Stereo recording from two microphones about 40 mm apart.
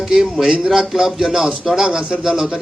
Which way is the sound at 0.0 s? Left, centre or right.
Centre.